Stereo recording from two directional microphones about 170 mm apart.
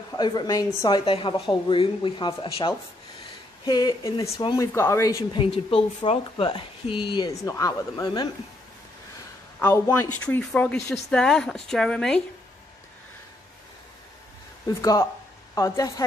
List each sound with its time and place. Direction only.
0.1 s a woman's voice: 25° left (ahead or behind)
5.4 s speech: 30° left (ahead or behind)
9.6 s speech: 15° left (ahead or behind)
14.7 s a woman's voice: 20° left (ahead or behind)